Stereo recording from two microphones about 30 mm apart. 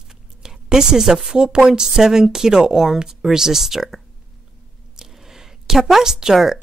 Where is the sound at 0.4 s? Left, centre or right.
Right.